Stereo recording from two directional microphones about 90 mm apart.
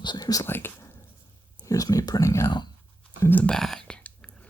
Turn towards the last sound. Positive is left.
turn(degrees=10)  # may be behind; listen again after turning